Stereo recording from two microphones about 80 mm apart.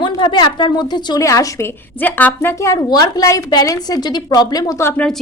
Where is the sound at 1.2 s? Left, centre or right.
Left.